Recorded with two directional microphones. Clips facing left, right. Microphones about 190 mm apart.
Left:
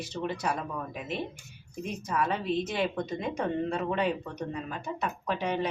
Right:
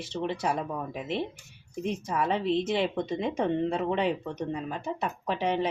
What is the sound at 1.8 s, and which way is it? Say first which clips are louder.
Speech: right 2 dB; 25° right (ahead or behind).